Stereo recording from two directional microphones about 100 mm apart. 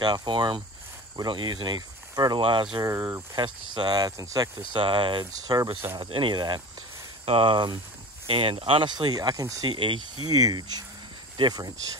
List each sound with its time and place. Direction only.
0.0 s speech: 50° right (ahead or behind)
2.8 s speech: 30° right (ahead or behind)
3.3 s speech: 50° right (ahead or behind)
4.7 s speech: 60° right (ahead or behind)
5.2 s speech: 40° right (ahead or behind)
6.0 s speech: 55° right (ahead or behind)
7.2 s speech: 60° right (ahead or behind)
8.3 s speech: 65° right (ahead or behind); by 9.7 s 35° right (ahead or behind)
9.7 s speech: 55° right (ahead or behind)
10.2 s speech: 40° right (ahead or behind)